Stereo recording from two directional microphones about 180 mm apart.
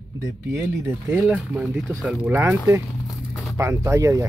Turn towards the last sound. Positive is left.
turn(degrees=-15)  # may be behind; listen again after turning